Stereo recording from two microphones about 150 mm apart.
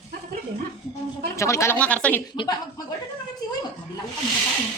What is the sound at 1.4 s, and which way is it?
Speech, 20° left (ahead or behind).